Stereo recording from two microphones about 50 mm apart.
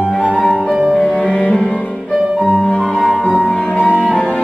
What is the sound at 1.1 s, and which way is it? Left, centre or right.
Cello, left.